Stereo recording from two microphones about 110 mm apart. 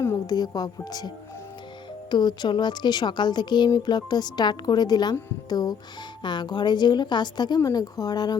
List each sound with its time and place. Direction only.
0.3 s speech: 40° left (ahead or behind)